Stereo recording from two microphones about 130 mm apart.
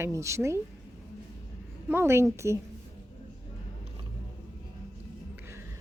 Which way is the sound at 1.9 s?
20° right (ahead or behind).